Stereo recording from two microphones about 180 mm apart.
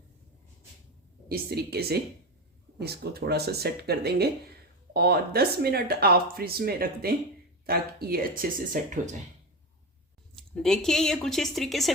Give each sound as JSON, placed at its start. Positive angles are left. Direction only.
{"t": 1.3, "sound": "speech", "side_deg": -60}
{"t": 10.3, "sound": "speech", "side_deg": 5}